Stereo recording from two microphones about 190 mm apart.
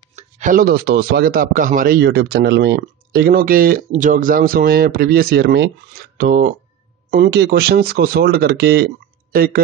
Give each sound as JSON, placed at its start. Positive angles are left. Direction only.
{"t": 0.1, "sound": "speech", "side_deg": -45}